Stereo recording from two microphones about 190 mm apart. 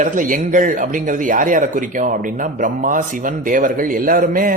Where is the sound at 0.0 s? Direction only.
45° right (ahead or behind).